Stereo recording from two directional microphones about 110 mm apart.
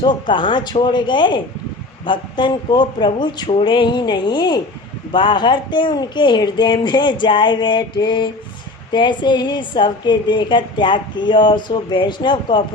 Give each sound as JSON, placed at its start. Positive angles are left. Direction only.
{"t": 0.0, "sound": "a woman's voice", "side_deg": 45}